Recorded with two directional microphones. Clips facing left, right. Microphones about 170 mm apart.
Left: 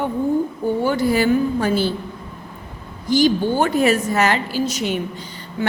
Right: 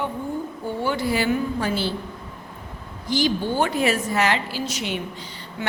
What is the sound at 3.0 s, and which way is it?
A woman's voice, 45° left (ahead or behind).